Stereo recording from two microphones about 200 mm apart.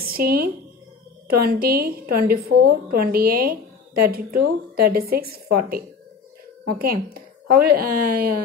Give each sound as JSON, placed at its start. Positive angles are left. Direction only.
{"t": 0.1, "sound": "a woman's voice", "side_deg": -50}